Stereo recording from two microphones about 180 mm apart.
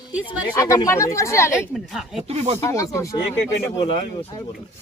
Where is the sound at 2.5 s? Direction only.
15° left (ahead or behind).